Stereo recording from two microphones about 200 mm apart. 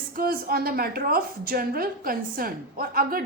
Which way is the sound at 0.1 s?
45° right (ahead or behind).